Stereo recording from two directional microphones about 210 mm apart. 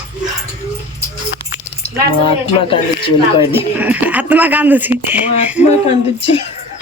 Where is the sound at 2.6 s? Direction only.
25° left (ahead or behind).